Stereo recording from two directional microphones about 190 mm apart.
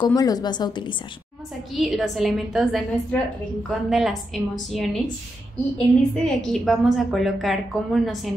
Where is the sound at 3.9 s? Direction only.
Centre (ahead or behind).